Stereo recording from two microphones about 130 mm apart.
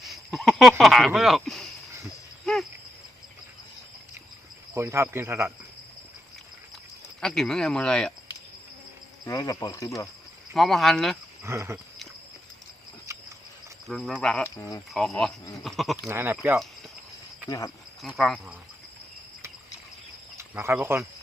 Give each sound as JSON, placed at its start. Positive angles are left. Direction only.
{"t": 0.0, "sound": "a sound", "side_deg": 0}
{"t": 0.8, "sound": "speech", "side_deg": 0}
{"t": 4.7, "sound": "speech", "side_deg": -20}
{"t": 7.2, "sound": "speech", "side_deg": 5}
{"t": 9.2, "sound": "speech", "side_deg": 25}
{"t": 10.5, "sound": "speech", "side_deg": 0}
{"t": 11.4, "sound": "speech", "side_deg": -20}
{"t": 13.1, "sound": "a sound", "side_deg": -20}
{"t": 13.8, "sound": "speech", "side_deg": 0}
{"t": 14.5, "sound": "speech", "side_deg": 25}
{"t": 14.9, "sound": "speech", "side_deg": 0}
{"t": 16.0, "sound": "speech", "side_deg": -20}
{"t": 18.0, "sound": "speech", "side_deg": 0}
{"t": 20.3, "sound": "speech", "side_deg": -20}